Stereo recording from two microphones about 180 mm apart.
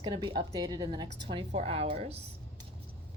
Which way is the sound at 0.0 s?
25° right (ahead or behind).